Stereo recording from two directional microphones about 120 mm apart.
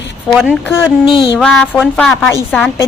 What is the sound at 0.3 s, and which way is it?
A woman's voice, 5° right (ahead or behind).